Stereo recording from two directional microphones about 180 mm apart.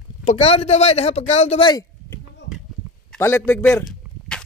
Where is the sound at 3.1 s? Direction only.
15° left (ahead or behind).